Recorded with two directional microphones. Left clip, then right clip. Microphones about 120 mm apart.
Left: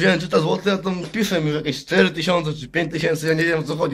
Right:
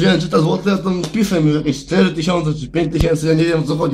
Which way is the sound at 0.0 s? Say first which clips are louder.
Right 3 dB; 35° left (ahead or behind).